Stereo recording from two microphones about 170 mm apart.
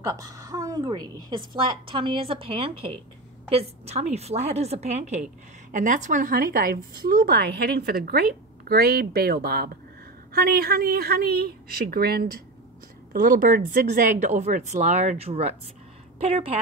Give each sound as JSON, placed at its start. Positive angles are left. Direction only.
{"t": 0.0, "sound": "a woman's voice", "side_deg": -20}
{"t": 13.1, "sound": "speech", "side_deg": -55}
{"t": 14.3, "sound": "a woman's voice", "side_deg": -40}